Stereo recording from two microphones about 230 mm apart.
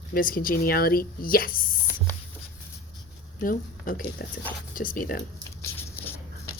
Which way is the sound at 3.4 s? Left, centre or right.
Left.